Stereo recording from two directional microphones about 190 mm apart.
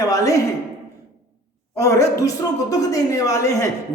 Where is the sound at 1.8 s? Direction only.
15° left (ahead or behind).